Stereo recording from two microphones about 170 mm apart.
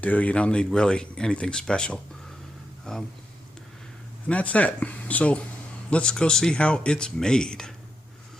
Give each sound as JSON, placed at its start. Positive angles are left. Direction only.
{"t": 0.0, "sound": "speech", "side_deg": 10}
{"t": 4.3, "sound": "speech", "side_deg": 10}